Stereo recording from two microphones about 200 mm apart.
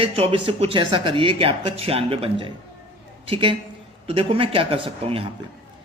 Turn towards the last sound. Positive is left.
turn(degrees=-30)  # may be behind; listen again after turning